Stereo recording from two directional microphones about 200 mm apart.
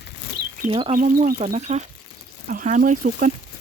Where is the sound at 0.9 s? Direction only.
40° right (ahead or behind).